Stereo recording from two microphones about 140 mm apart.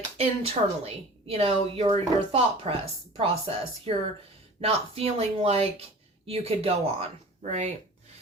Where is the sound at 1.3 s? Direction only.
45° right (ahead or behind).